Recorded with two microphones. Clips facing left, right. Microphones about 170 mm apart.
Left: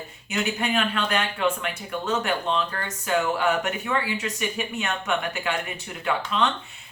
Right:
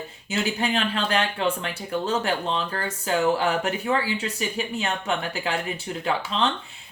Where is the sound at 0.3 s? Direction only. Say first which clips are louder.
Right 1 dB; 30° right (ahead or behind).